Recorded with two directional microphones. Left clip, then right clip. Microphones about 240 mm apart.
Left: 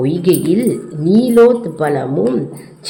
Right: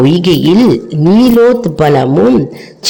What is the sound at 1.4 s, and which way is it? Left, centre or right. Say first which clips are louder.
A woman's voice: right 2 dB; right.